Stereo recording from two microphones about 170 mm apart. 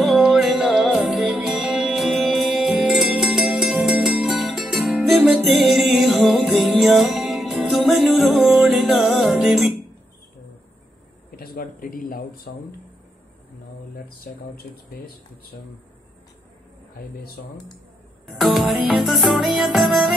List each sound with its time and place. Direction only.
0.0 s music: centre (ahead or behind)
11.3 s a sound: 60° left (ahead or behind)
12.5 s speech: 65° left (ahead or behind)
13.9 s speech: 65° left (ahead or behind)
18.2 s music: centre (ahead or behind)